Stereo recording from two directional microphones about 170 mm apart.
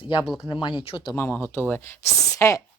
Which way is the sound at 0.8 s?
35° left (ahead or behind).